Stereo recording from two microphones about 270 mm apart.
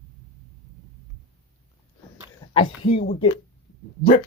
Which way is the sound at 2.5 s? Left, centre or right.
Left.